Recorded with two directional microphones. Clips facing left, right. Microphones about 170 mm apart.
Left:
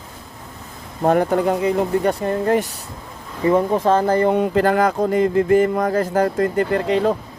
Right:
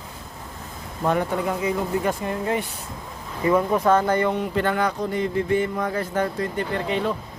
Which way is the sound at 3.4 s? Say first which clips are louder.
Left 3 dB; 30° left (ahead or behind).